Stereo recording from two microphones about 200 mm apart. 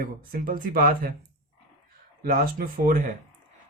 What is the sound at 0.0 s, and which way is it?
Speech, 45° right (ahead or behind).